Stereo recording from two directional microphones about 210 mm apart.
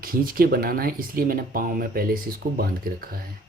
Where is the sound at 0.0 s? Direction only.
45° right (ahead or behind).